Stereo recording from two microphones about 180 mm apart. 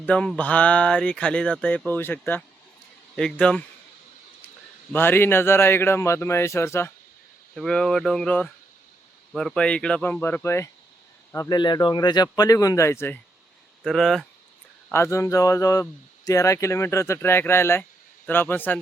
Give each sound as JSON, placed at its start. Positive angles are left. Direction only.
{"t": 0.0, "sound": "speech", "side_deg": 5}
{"t": 4.9, "sound": "speech", "side_deg": 10}
{"t": 7.5, "sound": "speech", "side_deg": 5}
{"t": 13.8, "sound": "speech", "side_deg": 0}
{"t": 14.9, "sound": "speech", "side_deg": 15}